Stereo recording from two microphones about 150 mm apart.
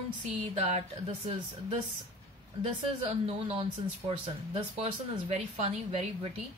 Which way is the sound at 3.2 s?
40° right (ahead or behind).